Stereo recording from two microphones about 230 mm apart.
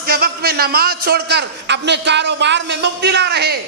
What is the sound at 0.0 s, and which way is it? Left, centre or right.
A man's voice, right.